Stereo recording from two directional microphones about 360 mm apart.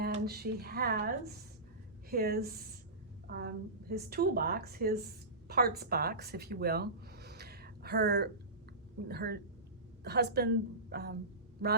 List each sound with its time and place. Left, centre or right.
0.0 s a woman's voice: right